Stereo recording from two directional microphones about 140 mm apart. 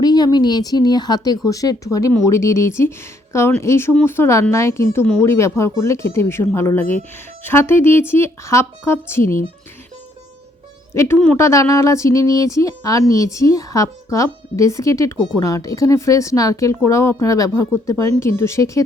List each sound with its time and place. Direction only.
0.0 s speech: 30° left (ahead or behind)
10.9 s speech: 20° left (ahead or behind)